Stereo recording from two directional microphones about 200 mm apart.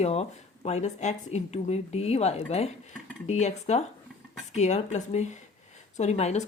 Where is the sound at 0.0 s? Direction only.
30° left (ahead or behind).